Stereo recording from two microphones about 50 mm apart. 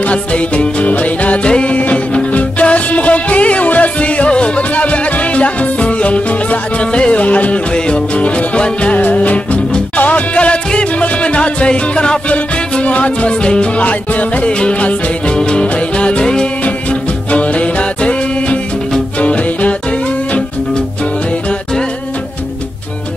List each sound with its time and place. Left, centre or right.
0.0 s music: left